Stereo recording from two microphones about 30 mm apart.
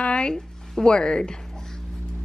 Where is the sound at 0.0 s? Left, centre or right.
Left.